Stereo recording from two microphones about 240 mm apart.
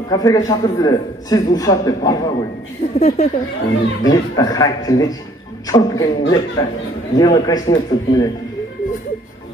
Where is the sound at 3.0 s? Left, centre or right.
Left.